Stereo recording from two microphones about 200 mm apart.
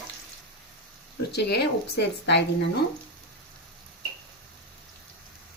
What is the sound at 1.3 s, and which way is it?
Speech, 55° left (ahead or behind).